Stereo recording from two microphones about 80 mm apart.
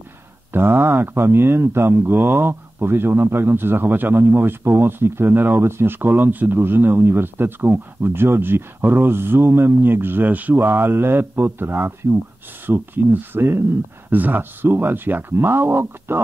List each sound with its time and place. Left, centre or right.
0.5 s speech: right